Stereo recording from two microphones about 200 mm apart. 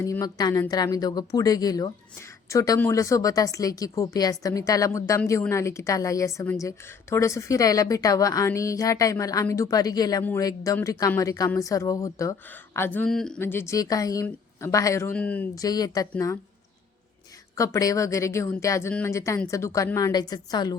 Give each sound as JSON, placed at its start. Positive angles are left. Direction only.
{"t": 0.0, "sound": "a woman's voice", "side_deg": 15}
{"t": 17.5, "sound": "speech", "side_deg": 15}